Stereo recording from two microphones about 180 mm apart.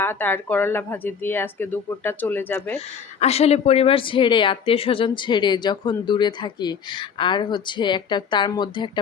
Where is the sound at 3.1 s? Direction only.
35° left (ahead or behind).